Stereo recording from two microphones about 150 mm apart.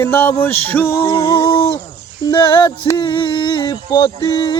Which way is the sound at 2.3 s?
25° left (ahead or behind).